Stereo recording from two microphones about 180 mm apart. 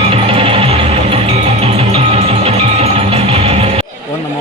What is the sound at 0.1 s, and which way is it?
Music, 30° right (ahead or behind).